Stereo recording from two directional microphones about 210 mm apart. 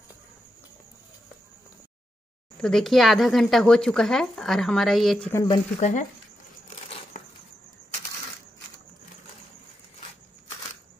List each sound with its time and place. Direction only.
2.5 s speech: 5° left (ahead or behind)
5.3 s speech: 15° left (ahead or behind)
5.8 s speech: 35° left (ahead or behind)